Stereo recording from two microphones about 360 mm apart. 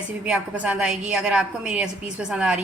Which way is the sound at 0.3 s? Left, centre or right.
Centre.